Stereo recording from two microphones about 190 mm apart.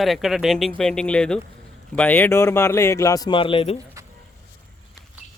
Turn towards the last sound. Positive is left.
turn(degrees=30)  # may be behind; listen again after turning